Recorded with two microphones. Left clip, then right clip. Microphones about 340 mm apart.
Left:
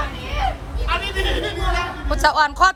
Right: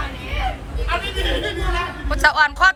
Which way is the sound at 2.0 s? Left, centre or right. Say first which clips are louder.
Right 1 dB; centre.